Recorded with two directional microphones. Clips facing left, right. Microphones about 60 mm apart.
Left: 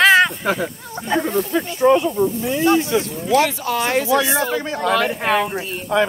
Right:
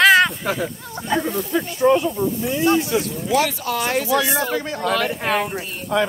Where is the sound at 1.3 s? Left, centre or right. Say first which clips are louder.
Left 2 dB; left.